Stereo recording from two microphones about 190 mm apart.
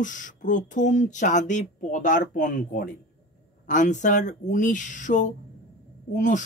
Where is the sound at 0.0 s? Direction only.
40° left (ahead or behind).